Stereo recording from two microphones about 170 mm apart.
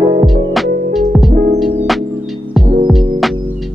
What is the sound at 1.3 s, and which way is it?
Music, 50° right (ahead or behind).